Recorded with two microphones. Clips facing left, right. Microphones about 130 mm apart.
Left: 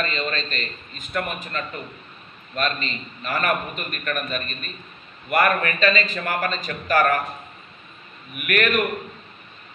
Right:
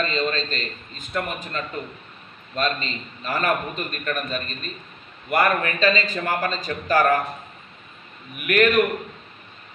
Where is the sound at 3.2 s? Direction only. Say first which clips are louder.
Right 1 dB; 25° right (ahead or behind).